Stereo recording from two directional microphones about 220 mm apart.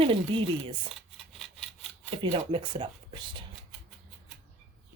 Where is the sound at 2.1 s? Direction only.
25° right (ahead or behind).